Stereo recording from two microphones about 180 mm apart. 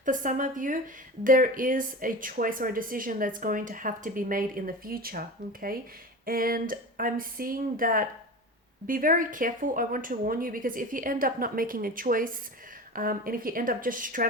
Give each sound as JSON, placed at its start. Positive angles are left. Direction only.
{"t": 0.0, "sound": "speech", "side_deg": -45}